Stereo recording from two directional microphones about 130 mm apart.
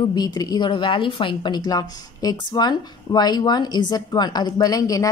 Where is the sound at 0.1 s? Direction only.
30° left (ahead or behind).